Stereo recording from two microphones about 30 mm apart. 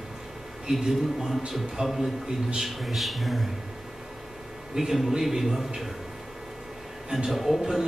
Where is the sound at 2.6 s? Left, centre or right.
Centre.